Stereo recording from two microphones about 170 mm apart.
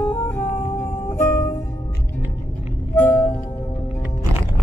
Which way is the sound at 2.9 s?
10° left (ahead or behind).